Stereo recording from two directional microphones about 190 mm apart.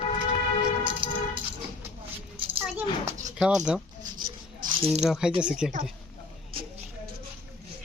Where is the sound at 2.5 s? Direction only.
10° right (ahead or behind).